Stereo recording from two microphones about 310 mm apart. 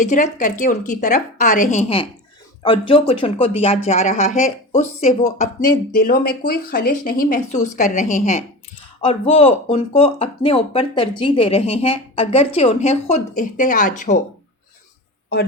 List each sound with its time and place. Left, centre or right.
0.0 s speech: left